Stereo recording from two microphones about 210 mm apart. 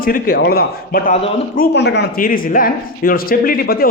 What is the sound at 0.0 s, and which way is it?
Speech, 45° left (ahead or behind).